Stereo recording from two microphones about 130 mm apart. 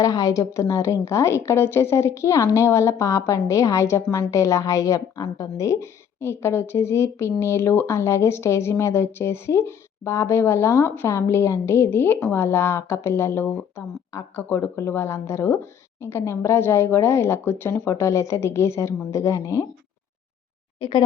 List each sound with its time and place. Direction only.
0.0 s a woman's voice: 25° left (ahead or behind)